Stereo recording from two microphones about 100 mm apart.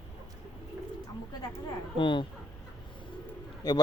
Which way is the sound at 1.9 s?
55° left (ahead or behind).